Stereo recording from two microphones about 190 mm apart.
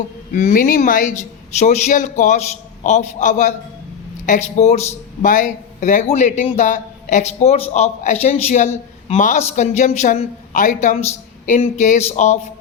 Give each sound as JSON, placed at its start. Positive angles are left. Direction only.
{"t": 0.3, "sound": "a man's voice", "side_deg": 45}